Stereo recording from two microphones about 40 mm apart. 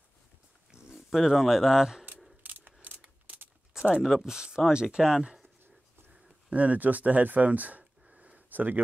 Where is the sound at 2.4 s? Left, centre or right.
Right.